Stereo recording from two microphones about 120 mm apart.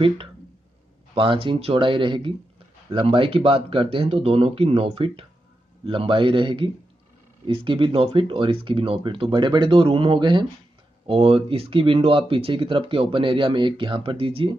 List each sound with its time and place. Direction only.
1.1 s speech: 45° right (ahead or behind)